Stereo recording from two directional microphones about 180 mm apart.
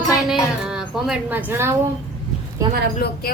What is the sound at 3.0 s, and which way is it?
Speech, 65° left (ahead or behind).